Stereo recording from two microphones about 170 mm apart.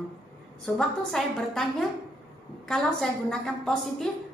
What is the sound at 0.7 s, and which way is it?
A woman's voice, centre (ahead or behind).